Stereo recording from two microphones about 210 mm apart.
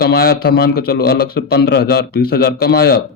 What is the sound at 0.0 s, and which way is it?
A man's voice, 50° left (ahead or behind).